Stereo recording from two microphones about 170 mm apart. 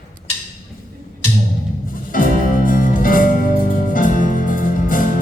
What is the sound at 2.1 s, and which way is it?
Music, 55° left (ahead or behind).